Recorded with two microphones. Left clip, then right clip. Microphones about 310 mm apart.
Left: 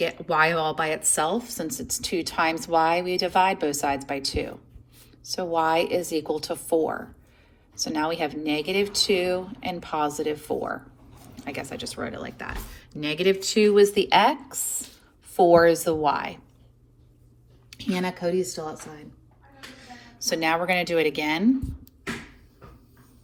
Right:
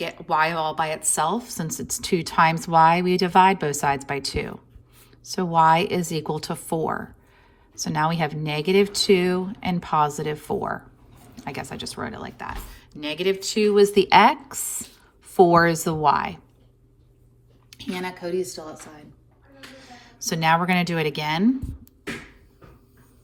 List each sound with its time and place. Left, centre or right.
0.0 s speech: centre; by 6.7 s right
7.9 s speech: right
17.7 s a woman's voice: centre
19.8 s speech: centre